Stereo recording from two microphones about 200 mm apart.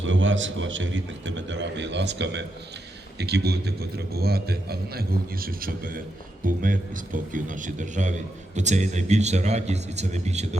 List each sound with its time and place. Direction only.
0.0 s a man's voice: 70° right (ahead or behind); by 10.6 s 35° right (ahead or behind)